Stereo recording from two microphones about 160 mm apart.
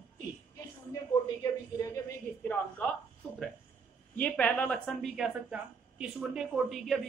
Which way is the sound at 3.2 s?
5° left (ahead or behind).